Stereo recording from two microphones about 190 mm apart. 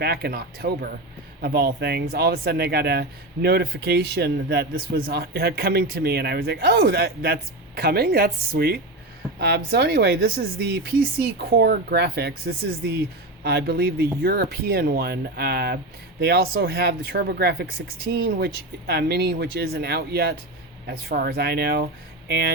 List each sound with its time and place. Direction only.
0.0 s speech: 55° right (ahead or behind)